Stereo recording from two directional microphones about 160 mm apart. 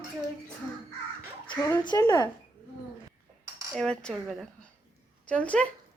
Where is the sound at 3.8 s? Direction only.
5° left (ahead or behind).